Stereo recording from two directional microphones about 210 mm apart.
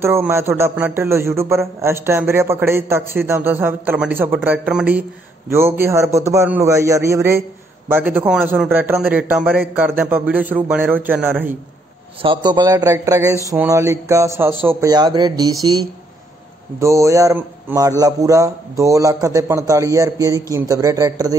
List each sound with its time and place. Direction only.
0.0 s a man's voice: 10° right (ahead or behind)
12.2 s a man's voice: 20° right (ahead or behind)